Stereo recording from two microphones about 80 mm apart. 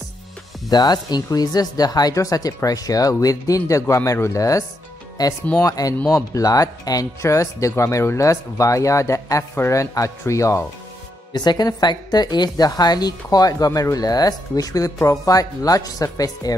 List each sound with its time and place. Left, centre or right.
0.7 s speech: left
7.2 s speech: left
11.3 s speech: left